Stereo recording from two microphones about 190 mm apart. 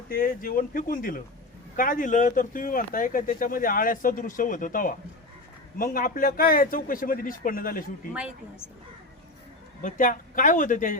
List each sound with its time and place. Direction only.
0.1 s speech: 50° left (ahead or behind)
9.8 s speech: 45° left (ahead or behind)